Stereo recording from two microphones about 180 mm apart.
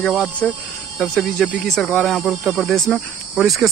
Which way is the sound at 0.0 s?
5° left (ahead or behind).